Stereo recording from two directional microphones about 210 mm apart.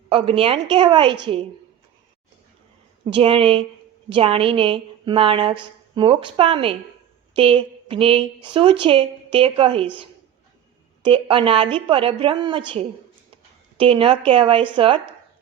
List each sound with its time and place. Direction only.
0.1 s a woman's voice: 25° right (ahead or behind)
3.1 s a woman's voice: 25° right (ahead or behind)
11.0 s a woman's voice: 25° right (ahead or behind)
13.7 s a woman's voice: 25° right (ahead or behind)